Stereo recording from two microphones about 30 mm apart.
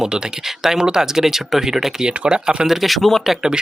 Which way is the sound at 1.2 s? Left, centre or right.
Centre.